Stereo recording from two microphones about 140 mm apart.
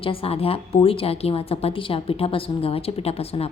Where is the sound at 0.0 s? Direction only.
40° left (ahead or behind).